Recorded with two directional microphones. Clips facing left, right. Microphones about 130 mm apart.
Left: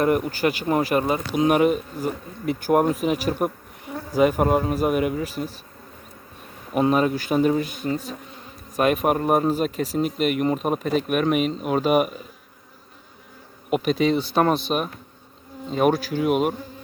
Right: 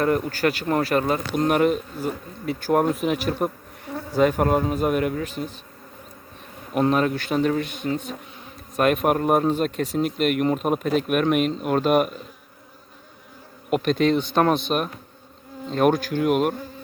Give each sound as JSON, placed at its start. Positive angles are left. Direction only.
{"t": 0.0, "sound": "speech", "side_deg": 15}
{"t": 2.5, "sound": "speech", "side_deg": 15}
{"t": 3.0, "sound": "speech", "side_deg": 5}
{"t": 6.7, "sound": "speech", "side_deg": 5}
{"t": 13.7, "sound": "speech", "side_deg": 5}